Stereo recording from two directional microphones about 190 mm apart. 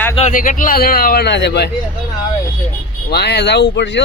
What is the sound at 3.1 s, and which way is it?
Speech, 60° left (ahead or behind).